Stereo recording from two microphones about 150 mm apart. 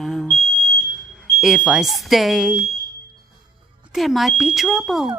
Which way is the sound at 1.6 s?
Centre (ahead or behind).